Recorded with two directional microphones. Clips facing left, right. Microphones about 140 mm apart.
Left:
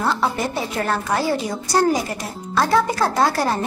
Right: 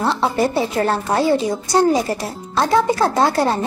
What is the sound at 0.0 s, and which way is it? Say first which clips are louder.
Speech: right 3 dB; 30° right (ahead or behind).